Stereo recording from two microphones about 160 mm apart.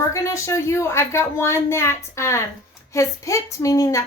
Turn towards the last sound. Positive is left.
turn(degrees=20)  # may be behind; listen again after turning